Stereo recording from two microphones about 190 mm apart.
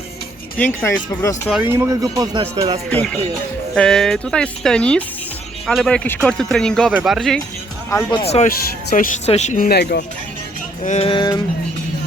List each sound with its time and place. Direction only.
0.6 s speech: 10° left (ahead or behind)
1.7 s music: 15° right (ahead or behind)
2.9 s speech: 5° left (ahead or behind)
7.9 s speech: 15° left (ahead or behind)
8.2 s speech: 35° left (ahead or behind); by 10.0 s 60° left (ahead or behind)
10.8 s a sound: 30° left (ahead or behind)